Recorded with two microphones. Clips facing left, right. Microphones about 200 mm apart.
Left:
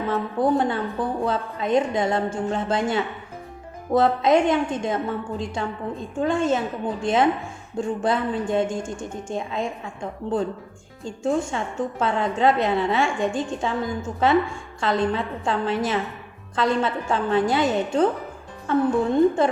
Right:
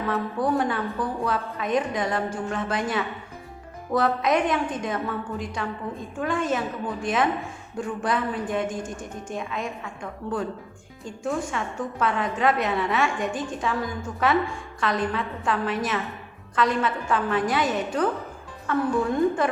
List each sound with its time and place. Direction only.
0.3 s a woman's voice: 25° left (ahead or behind)